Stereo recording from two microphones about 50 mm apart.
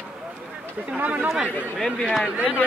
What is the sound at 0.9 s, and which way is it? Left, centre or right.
Speech, right.